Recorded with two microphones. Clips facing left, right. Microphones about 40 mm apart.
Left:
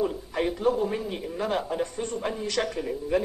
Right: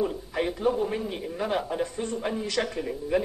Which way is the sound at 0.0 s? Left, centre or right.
Centre.